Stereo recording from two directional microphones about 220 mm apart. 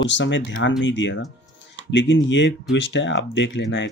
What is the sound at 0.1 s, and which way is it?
Speech, 55° left (ahead or behind).